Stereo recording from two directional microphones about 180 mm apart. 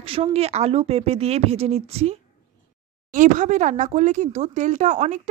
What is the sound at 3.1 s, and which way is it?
Speech, 45° right (ahead or behind).